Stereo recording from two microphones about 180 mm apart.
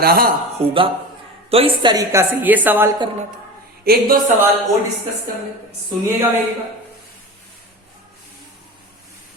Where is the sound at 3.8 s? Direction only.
60° right (ahead or behind).